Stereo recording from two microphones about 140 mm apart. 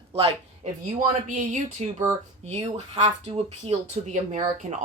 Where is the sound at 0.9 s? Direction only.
60° right (ahead or behind).